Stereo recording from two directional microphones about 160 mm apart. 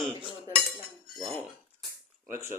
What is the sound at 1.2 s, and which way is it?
Speech, centre (ahead or behind).